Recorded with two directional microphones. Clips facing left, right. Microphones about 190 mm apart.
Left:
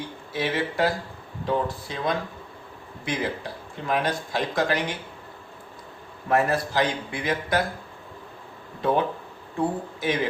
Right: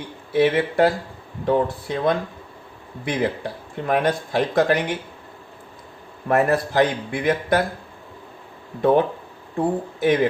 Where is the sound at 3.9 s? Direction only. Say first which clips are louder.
Right 5 dB; 55° right (ahead or behind).